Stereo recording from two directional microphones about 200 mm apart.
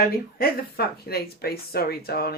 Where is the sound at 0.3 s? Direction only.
50° left (ahead or behind).